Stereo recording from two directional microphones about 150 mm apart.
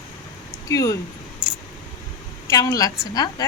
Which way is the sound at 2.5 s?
25° left (ahead or behind).